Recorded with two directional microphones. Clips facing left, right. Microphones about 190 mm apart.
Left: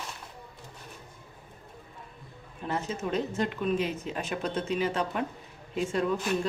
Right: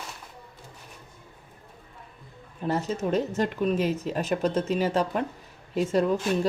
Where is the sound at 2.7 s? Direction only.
40° right (ahead or behind).